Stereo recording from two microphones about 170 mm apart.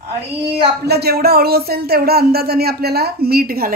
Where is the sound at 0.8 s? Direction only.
70° right (ahead or behind).